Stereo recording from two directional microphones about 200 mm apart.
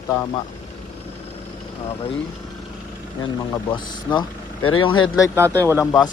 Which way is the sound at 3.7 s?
25° left (ahead or behind).